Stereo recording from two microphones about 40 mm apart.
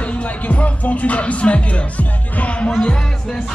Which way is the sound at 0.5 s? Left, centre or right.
Left.